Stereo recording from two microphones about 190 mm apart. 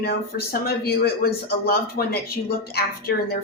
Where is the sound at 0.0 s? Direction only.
55° left (ahead or behind).